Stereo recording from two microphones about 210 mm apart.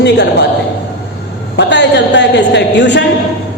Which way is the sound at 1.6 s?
55° left (ahead or behind).